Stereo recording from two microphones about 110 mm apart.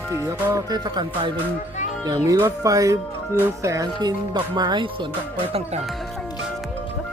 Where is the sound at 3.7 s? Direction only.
35° right (ahead or behind).